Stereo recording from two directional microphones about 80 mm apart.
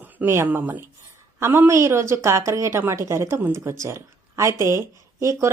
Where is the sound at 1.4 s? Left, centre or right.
Right.